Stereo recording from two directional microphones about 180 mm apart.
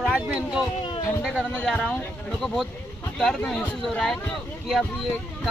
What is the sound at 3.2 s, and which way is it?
A man's voice, centre (ahead or behind).